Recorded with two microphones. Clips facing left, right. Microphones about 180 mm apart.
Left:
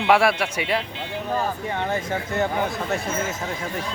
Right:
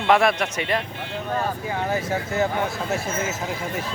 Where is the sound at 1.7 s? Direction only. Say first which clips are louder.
Right 1 dB; 5° right (ahead or behind).